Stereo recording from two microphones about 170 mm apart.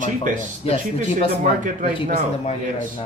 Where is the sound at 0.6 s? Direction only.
35° left (ahead or behind).